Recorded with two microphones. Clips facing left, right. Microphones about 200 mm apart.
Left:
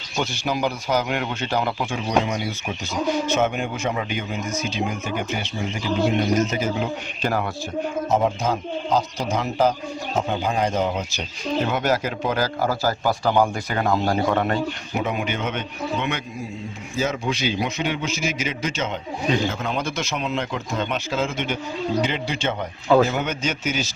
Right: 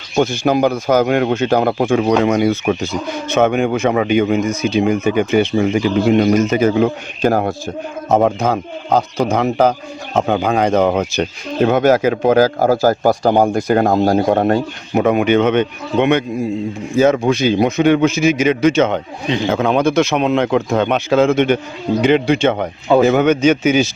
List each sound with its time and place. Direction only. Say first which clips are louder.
0.2 s speech: right 10 dB; 50° right (ahead or behind)
2.0 s speech: right 7 dB; 65° right (ahead or behind); by 7.5 s 45° right (ahead or behind)
8.1 s speech: right 8 dB; 60° right (ahead or behind)